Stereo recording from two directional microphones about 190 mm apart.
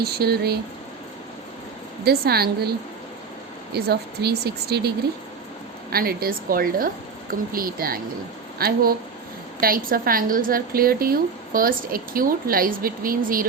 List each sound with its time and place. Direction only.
0.0 s speech: 55° right (ahead or behind)
2.0 s speech: 55° right (ahead or behind)
5.9 s a woman's voice: 50° right (ahead or behind)